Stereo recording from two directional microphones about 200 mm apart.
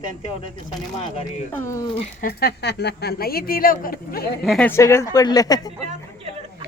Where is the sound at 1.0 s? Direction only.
30° left (ahead or behind).